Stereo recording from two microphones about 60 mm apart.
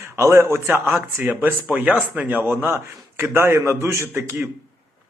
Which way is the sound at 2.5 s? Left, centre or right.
Right.